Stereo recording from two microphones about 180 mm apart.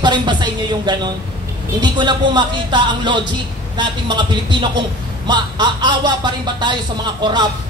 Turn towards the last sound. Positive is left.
turn(degrees=-25)  # may be behind; listen again after turning